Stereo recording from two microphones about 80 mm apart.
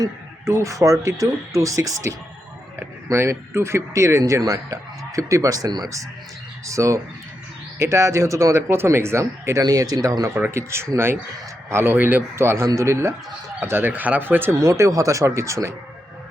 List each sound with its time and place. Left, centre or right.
0.0 s speech: right
6.7 s speech: right
13.6 s speech: right
14.5 s speech: right